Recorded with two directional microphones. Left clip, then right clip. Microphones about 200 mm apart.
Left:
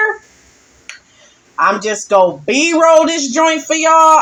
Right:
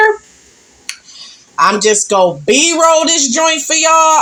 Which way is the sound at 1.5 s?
35° right (ahead or behind).